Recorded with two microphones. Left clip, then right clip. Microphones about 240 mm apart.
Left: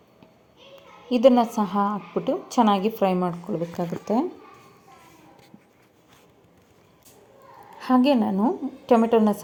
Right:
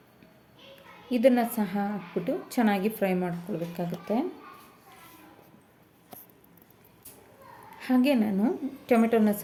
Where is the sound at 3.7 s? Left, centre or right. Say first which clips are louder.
Left 5 dB; left.